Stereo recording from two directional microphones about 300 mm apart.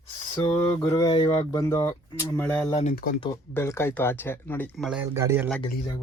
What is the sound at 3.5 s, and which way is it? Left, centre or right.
Speech, centre.